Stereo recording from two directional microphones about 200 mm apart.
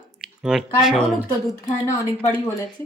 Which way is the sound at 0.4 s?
Centre (ahead or behind).